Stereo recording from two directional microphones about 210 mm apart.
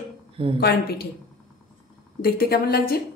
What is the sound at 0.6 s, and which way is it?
Speech, 50° left (ahead or behind).